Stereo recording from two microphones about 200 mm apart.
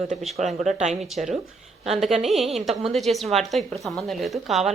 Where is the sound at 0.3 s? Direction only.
35° right (ahead or behind).